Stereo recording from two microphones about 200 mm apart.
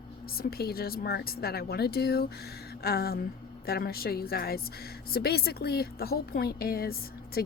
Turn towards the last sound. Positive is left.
turn(degrees=50)  # may be behind; listen again after turning